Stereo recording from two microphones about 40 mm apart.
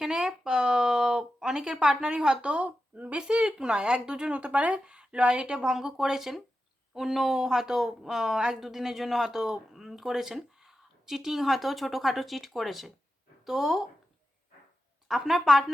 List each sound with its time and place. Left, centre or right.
0.0 s a sound: centre
2.0 s speech: right
3.2 s speech: centre
15.0 s speech: centre